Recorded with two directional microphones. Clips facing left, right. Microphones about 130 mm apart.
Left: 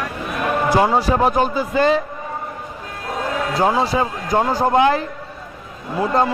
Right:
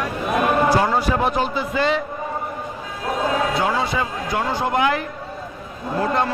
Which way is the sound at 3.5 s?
35° left (ahead or behind).